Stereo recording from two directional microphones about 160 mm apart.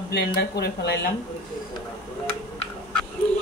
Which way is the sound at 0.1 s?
85° left.